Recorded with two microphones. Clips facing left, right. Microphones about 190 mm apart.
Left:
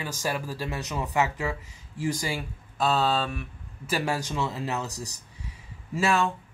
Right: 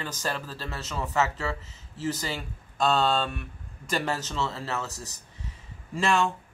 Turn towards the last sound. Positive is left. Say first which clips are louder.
# even
turn(degrees=5)  # may be behind; listen again after turning